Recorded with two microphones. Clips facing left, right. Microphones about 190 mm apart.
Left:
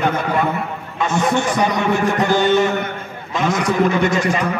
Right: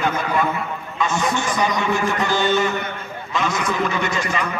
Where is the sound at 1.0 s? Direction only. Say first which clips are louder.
Left 4 dB; 60° left (ahead or behind).